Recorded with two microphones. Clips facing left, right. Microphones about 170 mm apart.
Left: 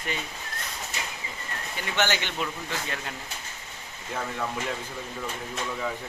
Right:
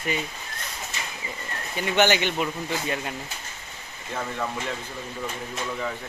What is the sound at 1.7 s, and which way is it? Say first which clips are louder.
Speech: right 6 dB; 15° right (ahead or behind).